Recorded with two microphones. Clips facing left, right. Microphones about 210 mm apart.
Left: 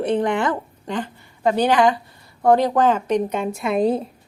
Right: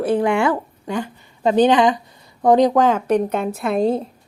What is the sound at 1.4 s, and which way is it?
A woman's voice, 20° right (ahead or behind).